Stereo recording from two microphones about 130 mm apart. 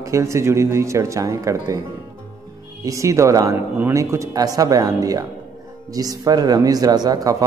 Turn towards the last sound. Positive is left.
turn(degrees=-25)  # may be behind; listen again after turning